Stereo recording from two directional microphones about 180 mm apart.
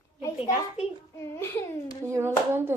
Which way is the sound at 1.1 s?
15° left (ahead or behind).